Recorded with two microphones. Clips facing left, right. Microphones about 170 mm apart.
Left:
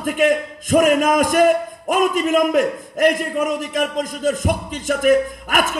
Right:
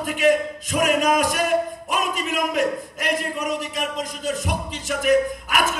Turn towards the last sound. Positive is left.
turn(degrees=50)  # may be behind; listen again after turning